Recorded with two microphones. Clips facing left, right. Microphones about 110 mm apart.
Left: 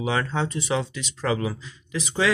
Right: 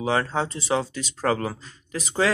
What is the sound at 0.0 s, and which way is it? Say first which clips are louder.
Speech: right 1 dB; 35° right (ahead or behind).